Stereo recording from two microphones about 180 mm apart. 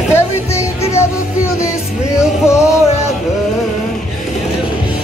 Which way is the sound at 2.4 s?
15° left (ahead or behind).